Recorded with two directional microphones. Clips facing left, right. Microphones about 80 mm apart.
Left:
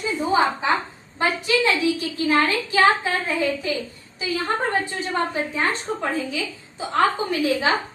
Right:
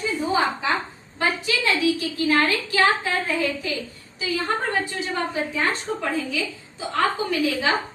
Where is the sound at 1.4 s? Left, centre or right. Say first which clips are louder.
Left 3 dB; left.